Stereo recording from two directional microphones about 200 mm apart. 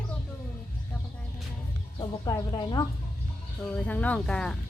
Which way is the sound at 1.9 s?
20° left (ahead or behind).